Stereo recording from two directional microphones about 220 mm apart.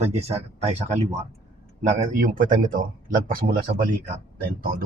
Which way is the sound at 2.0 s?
40° right (ahead or behind).